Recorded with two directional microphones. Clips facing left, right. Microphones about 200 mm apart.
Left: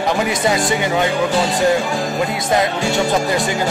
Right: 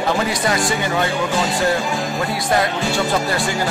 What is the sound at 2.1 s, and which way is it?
Speech, 20° left (ahead or behind).